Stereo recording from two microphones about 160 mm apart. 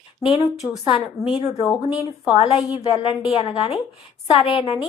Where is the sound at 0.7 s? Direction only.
30° left (ahead or behind).